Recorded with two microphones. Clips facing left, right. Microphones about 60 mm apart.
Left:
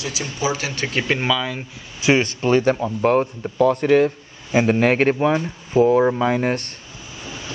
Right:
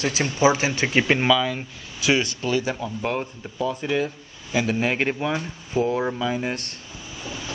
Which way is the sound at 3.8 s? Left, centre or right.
Left.